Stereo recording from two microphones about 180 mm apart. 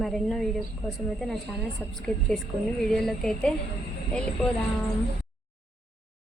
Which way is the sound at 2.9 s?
Centre (ahead or behind).